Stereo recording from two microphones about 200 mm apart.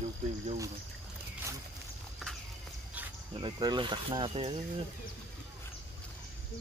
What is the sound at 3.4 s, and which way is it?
Speech, 25° right (ahead or behind).